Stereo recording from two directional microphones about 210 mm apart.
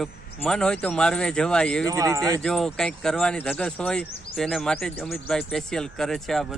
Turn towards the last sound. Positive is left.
turn(degrees=0)  # may be behind; listen again after turning